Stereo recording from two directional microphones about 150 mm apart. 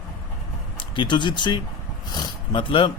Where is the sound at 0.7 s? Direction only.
35° left (ahead or behind).